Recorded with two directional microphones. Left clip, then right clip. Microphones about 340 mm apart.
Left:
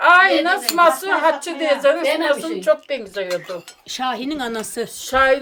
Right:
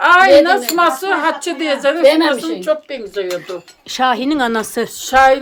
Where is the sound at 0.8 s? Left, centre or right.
Centre.